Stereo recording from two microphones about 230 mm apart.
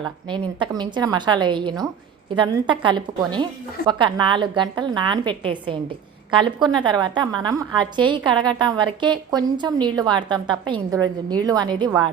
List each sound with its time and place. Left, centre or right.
0.3 s a woman's voice: centre